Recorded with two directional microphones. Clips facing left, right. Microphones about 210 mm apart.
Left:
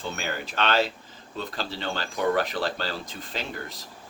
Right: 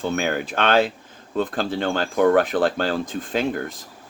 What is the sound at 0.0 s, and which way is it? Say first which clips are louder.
Speech: right 9 dB; 55° right (ahead or behind).